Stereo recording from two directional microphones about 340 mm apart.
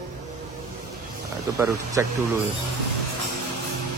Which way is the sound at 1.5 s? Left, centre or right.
Centre.